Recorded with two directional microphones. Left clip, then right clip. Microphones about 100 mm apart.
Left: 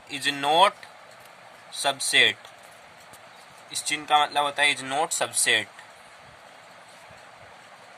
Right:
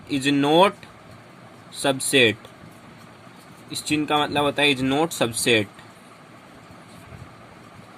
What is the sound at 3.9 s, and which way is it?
Speech, 20° right (ahead or behind).